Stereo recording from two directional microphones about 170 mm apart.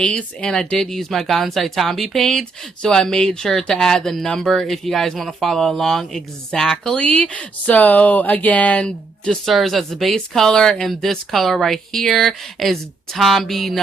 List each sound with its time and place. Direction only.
0.0 s speech: 5° left (ahead or behind)